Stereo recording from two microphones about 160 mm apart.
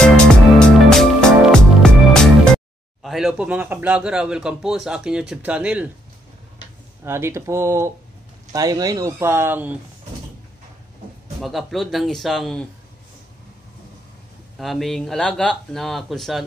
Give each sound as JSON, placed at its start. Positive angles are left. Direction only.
{"t": 0.0, "sound": "music", "side_deg": 5}
{"t": 7.1, "sound": "speech", "side_deg": -15}
{"t": 11.4, "sound": "speech", "side_deg": 0}
{"t": 14.6, "sound": "speech", "side_deg": 0}